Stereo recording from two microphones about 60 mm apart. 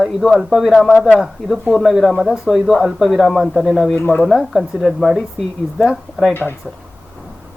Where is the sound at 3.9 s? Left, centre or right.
Left.